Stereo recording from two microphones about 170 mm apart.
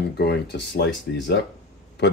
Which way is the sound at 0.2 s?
75° left (ahead or behind).